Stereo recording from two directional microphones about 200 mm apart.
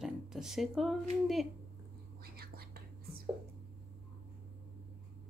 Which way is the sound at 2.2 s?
50° right (ahead or behind).